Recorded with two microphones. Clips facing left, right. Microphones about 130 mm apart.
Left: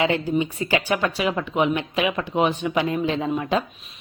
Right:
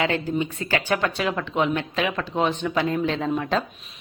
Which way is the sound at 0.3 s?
15° left (ahead or behind).